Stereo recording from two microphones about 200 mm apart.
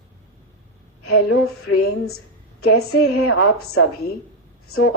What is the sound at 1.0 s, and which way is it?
A woman's voice, 90° left.